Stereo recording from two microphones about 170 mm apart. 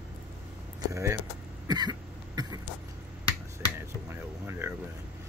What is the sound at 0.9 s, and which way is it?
Speech, 15° right (ahead or behind).